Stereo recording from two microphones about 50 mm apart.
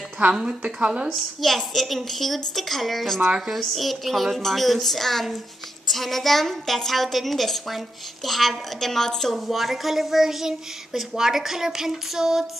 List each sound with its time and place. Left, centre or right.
0.3 s speech: centre
0.6 s speech: right
1.1 s a woman's voice: centre
9.3 s speech: centre